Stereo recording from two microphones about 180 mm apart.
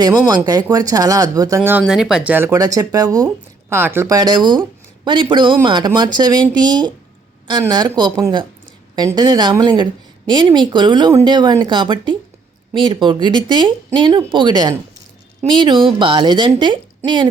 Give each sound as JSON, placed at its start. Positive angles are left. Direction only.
{"t": 0.0, "sound": "a woman's voice", "side_deg": -20}
{"t": 1.8, "sound": "a woman's voice", "side_deg": -5}
{"t": 7.4, "sound": "a woman's voice", "side_deg": -25}